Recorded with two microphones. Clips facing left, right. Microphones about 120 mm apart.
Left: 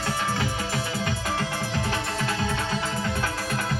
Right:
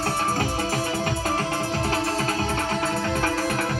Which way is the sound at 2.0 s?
40° right (ahead or behind).